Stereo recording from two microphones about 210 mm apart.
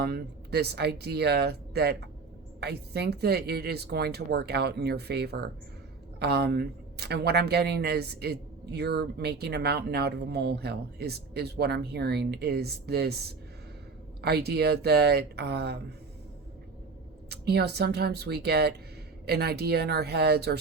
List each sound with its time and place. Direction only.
0.0 s speech: 50° right (ahead or behind)
17.2 s speech: 50° right (ahead or behind)